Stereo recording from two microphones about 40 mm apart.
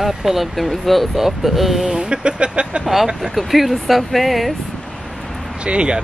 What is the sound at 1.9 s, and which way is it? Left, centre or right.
Speech, right.